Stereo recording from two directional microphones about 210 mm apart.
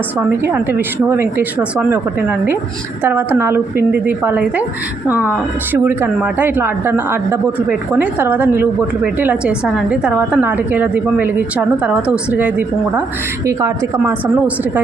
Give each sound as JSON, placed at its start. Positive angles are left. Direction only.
{"t": 0.4, "sound": "a woman's voice", "side_deg": -10}
{"t": 3.0, "sound": "a woman's voice", "side_deg": -10}
{"t": 5.7, "sound": "a woman's voice", "side_deg": -10}